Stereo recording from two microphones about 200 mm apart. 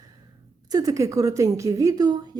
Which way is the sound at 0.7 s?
15° right (ahead or behind).